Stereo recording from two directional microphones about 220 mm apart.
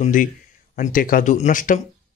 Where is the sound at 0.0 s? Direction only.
40° left (ahead or behind).